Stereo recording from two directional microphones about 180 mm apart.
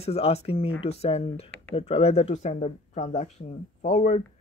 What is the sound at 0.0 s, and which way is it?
Speech, 35° left (ahead or behind).